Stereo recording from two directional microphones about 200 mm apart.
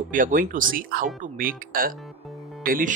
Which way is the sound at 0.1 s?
40° right (ahead or behind).